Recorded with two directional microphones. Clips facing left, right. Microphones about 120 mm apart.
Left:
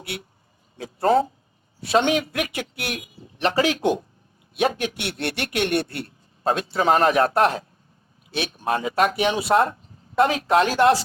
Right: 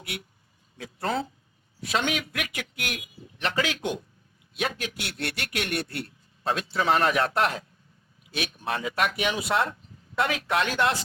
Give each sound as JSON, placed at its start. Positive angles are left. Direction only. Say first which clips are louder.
{"t": 0.0, "sound": "speech", "louder": "left 4 dB", "side_deg": 30}